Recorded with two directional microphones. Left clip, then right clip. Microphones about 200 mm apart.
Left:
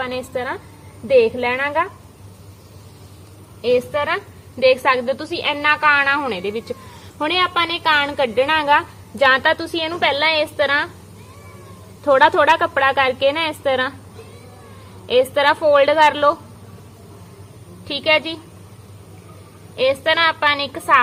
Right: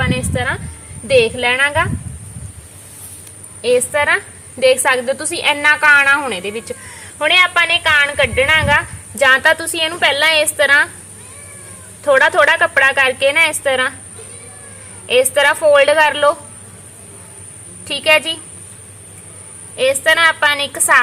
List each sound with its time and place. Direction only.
0.0 s a sound: 5° left (ahead or behind)
1.0 s a woman's voice: centre (ahead or behind)
3.6 s a woman's voice: 20° right (ahead or behind)
7.2 s a woman's voice: 35° left (ahead or behind); by 8.9 s 15° left (ahead or behind)
9.1 s a woman's voice: centre (ahead or behind)
12.0 s a woman's voice: 20° left (ahead or behind)
15.0 s a woman's voice: 5° left (ahead or behind)
17.8 s a woman's voice: 10° right (ahead or behind)
19.7 s a woman's voice: 5° right (ahead or behind)